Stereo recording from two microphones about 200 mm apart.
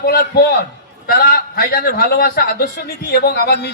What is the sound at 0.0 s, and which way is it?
A man's voice, 50° left (ahead or behind).